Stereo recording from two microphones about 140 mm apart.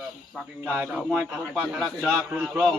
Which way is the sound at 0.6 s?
10° right (ahead or behind).